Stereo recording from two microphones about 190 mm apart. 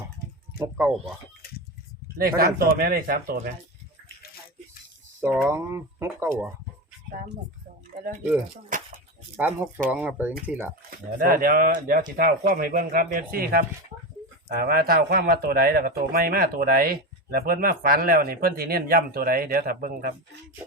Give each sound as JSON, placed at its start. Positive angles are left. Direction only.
{"t": 2.1, "sound": "speech", "side_deg": -50}
{"t": 5.5, "sound": "speech", "side_deg": -15}
{"t": 7.9, "sound": "speech", "side_deg": -40}
{"t": 8.7, "sound": "a sound", "side_deg": -45}
{"t": 9.3, "sound": "speech", "side_deg": -10}
{"t": 11.2, "sound": "speech", "side_deg": -50}